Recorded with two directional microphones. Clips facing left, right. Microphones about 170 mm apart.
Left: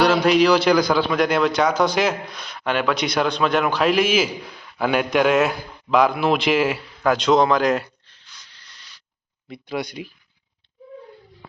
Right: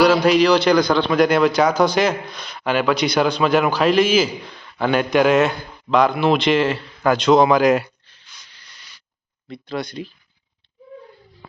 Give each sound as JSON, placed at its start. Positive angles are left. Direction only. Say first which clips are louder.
{"t": 0.0, "sound": "a man's voice", "louder": "right 2 dB", "side_deg": 0}
{"t": 8.3, "sound": "a sound", "louder": "right 1 dB", "side_deg": -15}
{"t": 9.5, "sound": "speech", "louder": "right 1 dB", "side_deg": 10}